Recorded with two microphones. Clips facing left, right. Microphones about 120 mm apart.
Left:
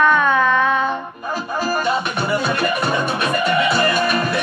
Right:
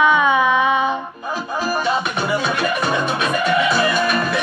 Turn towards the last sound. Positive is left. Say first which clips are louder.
# even
turn(degrees=0)  # may be behind; listen again after turning